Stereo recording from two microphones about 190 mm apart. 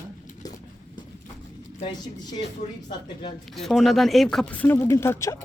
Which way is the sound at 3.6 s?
Centre (ahead or behind).